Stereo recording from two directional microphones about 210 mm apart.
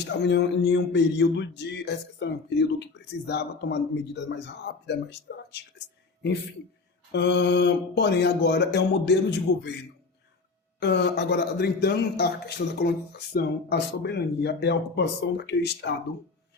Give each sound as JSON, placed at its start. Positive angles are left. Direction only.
{"t": 0.1, "sound": "speech", "side_deg": 55}
{"t": 7.1, "sound": "speech", "side_deg": 55}
{"t": 10.8, "sound": "speech", "side_deg": 55}